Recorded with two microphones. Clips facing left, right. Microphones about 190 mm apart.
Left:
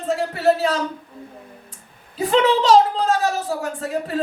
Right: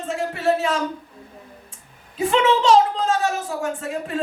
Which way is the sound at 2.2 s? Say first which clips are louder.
Left 1 dB; 35° left (ahead or behind).